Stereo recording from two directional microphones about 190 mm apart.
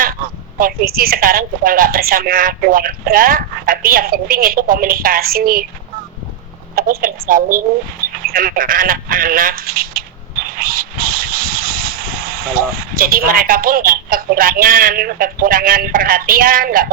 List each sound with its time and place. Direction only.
0.6 s a woman's voice: 50° right (ahead or behind)
6.7 s a woman's voice: 45° right (ahead or behind)
10.6 s vehicle: 50° right (ahead or behind)